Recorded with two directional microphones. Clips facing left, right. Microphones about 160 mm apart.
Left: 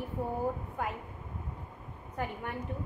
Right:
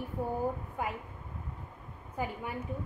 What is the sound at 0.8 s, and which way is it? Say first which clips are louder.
Speech: right 1 dB; 5° right (ahead or behind).